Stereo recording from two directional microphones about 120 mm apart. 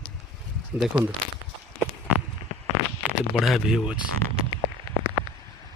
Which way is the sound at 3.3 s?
Centre (ahead or behind).